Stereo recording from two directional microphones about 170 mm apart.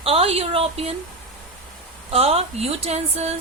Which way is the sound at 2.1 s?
35° right (ahead or behind).